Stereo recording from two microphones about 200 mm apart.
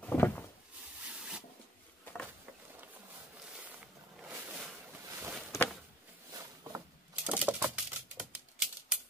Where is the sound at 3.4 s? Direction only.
5° right (ahead or behind).